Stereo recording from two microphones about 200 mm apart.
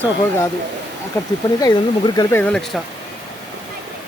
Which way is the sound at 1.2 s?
15° left (ahead or behind).